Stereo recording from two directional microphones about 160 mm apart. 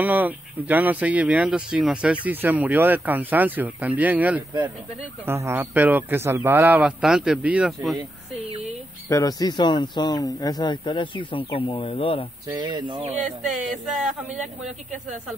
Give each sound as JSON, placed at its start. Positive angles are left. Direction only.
{"t": 0.0, "sound": "speech", "side_deg": -10}
{"t": 9.1, "sound": "speech", "side_deg": 25}
{"t": 12.5, "sound": "speech", "side_deg": -25}